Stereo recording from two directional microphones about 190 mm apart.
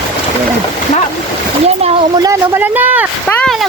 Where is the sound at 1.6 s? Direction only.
35° right (ahead or behind).